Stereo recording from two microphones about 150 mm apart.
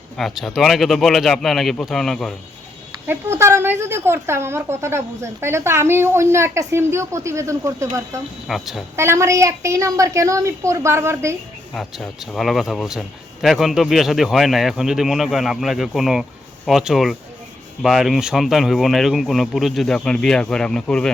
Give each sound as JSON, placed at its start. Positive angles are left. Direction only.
{"t": 0.2, "sound": "speech", "side_deg": 0}
{"t": 3.1, "sound": "a woman's voice", "side_deg": -20}
{"t": 8.4, "sound": "speech", "side_deg": 0}
{"t": 9.0, "sound": "a woman's voice", "side_deg": -20}
{"t": 11.7, "sound": "speech", "side_deg": 0}